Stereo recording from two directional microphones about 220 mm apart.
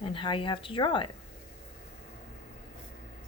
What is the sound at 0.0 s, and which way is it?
Speech, 25° left (ahead or behind).